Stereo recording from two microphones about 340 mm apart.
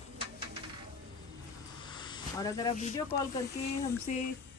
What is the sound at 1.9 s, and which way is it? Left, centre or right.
Speech, centre.